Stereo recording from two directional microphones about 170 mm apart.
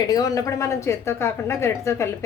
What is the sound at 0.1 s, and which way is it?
A woman's voice, 20° left (ahead or behind).